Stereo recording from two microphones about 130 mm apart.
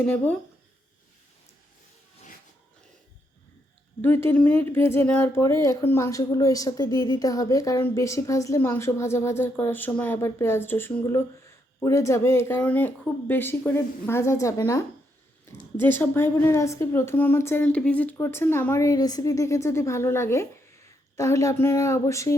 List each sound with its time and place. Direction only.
0.0 s speech: 10° left (ahead or behind)
4.0 s speech: 15° left (ahead or behind)
15.8 s speech: 15° left (ahead or behind)